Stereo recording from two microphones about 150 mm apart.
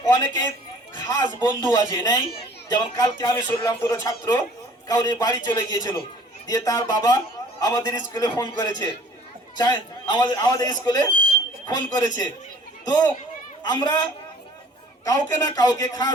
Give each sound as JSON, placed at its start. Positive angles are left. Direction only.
{"t": 0.0, "sound": "speech", "side_deg": 25}
{"t": 1.5, "sound": "a child's voice", "side_deg": 20}